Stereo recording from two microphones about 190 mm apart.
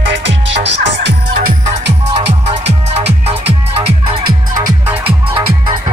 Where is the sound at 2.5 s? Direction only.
35° right (ahead or behind).